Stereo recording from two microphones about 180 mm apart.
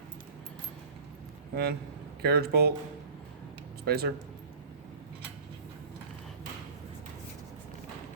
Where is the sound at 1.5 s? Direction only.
60° right (ahead or behind).